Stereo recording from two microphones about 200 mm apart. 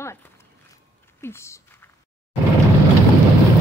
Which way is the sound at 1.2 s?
10° left (ahead or behind).